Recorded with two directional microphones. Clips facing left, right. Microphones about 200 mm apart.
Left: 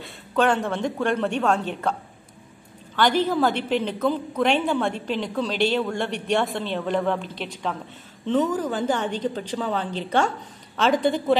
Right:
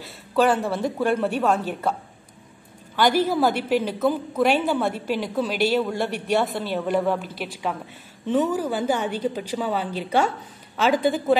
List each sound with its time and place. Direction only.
0.0 s a woman's voice: 5° right (ahead or behind)
3.0 s a woman's voice: 10° right (ahead or behind)